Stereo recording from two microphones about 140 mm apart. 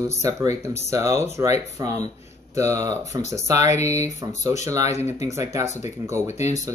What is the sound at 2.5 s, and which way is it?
Speech, 20° right (ahead or behind).